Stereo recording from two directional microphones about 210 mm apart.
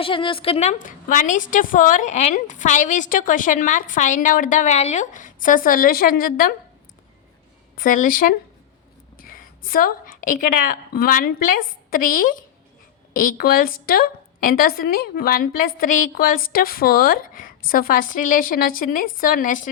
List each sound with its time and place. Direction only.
0.0 s a woman's voice: 25° left (ahead or behind); by 6.5 s 45° left (ahead or behind)
7.8 s a woman's voice: 40° left (ahead or behind)